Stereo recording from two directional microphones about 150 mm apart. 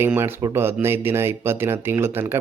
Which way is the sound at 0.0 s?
15° right (ahead or behind).